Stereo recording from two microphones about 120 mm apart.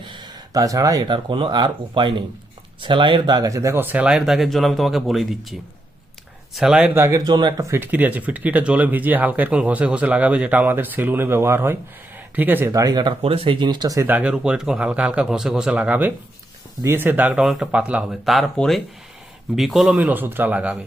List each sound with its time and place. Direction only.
0.0 s a sound: 40° right (ahead or behind)
1.1 s speech: 45° right (ahead or behind); by 6.9 s 5° right (ahead or behind)
6.9 s a man's voice: 20° right (ahead or behind)
7.3 s speech: 35° right (ahead or behind); by 12.7 s 15° right (ahead or behind)
12.7 s speech: 35° right (ahead or behind)
13.2 s speech: 50° right (ahead or behind); by 14.1 s 30° right (ahead or behind)
14.1 s speech: 10° right (ahead or behind)
20.0 s speech: 15° right (ahead or behind)